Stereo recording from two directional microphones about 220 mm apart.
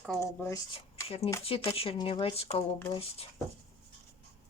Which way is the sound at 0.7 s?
25° left (ahead or behind).